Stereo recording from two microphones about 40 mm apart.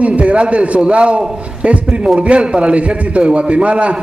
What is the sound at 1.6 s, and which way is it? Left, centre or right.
A man's voice, right.